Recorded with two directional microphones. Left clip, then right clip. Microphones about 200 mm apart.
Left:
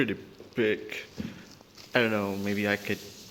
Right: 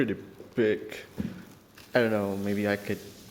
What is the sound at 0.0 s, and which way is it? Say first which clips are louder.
A man's voice: even; 10° right (ahead or behind).